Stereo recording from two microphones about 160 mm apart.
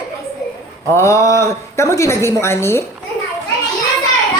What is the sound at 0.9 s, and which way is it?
A woman's voice, 20° left (ahead or behind).